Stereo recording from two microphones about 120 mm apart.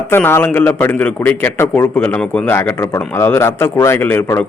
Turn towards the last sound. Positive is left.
turn(degrees=15)  # may be behind; listen again after turning